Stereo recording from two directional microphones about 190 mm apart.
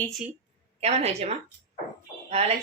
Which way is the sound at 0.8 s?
35° right (ahead or behind).